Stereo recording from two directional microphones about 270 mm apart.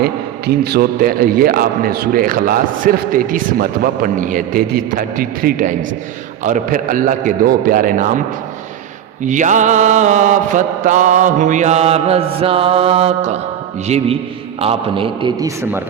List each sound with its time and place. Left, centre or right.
0.0 s a man's voice: right
6.4 s mantra: right
9.2 s mantra: right
14.6 s a man's voice: right